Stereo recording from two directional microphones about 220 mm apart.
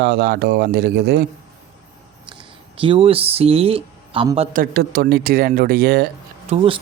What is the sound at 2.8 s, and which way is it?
Speech, 25° right (ahead or behind).